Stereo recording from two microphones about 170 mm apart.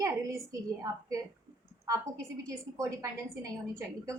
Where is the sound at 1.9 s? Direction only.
20° right (ahead or behind).